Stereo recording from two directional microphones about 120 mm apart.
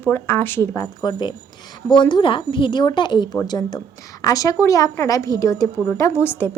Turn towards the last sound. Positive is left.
turn(degrees=20)  # may be behind; listen again after turning